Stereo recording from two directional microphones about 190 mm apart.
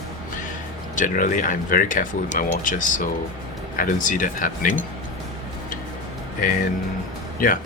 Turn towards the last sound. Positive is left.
turn(degrees=45)  # may be behind; listen again after turning